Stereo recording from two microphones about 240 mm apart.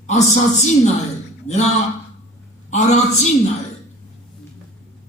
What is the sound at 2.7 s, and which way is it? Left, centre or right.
Speech, left.